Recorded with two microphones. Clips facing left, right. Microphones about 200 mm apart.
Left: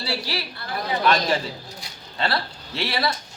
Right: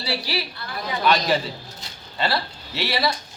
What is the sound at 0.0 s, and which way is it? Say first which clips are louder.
A woman's voice: right 1 dB; centre (ahead or behind).